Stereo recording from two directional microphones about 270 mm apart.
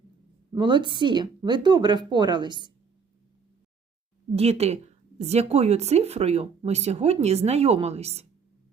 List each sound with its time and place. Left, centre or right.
0.5 s a woman's voice: centre
4.4 s speech: right